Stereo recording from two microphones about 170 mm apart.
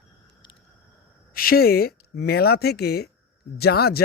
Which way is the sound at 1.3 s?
60° left (ahead or behind).